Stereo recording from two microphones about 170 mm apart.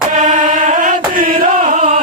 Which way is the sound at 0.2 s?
50° right (ahead or behind).